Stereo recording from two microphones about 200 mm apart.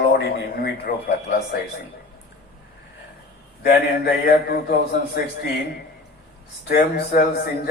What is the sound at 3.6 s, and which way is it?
A man's voice, 50° left (ahead or behind).